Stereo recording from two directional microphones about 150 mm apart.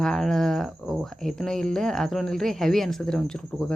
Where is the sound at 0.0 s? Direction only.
Centre (ahead or behind).